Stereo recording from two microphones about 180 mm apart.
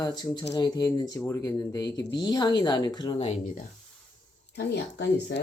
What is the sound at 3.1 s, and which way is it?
Speech, 35° left (ahead or behind).